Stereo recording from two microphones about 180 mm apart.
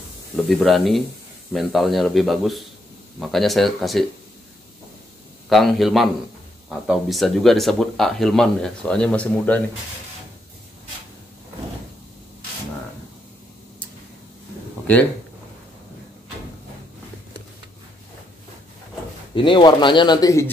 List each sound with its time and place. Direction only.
0.5 s speech: centre (ahead or behind)
5.5 s speech: centre (ahead or behind)
19.3 s speech: 25° left (ahead or behind)